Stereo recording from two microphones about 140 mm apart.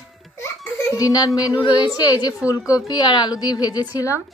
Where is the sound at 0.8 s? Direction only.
25° left (ahead or behind).